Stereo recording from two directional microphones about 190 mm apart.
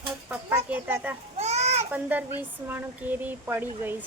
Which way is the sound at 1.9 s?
10° right (ahead or behind).